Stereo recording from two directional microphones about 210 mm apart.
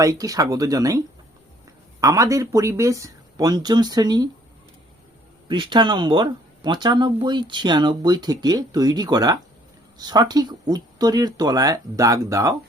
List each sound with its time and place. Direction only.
0.0 s speech: 15° right (ahead or behind)
5.5 s speech: 20° right (ahead or behind)